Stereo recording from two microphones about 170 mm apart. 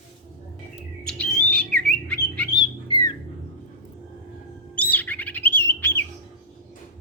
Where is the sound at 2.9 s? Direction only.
25° left (ahead or behind).